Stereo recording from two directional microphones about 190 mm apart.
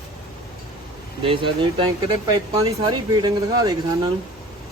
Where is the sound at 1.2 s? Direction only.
25° right (ahead or behind).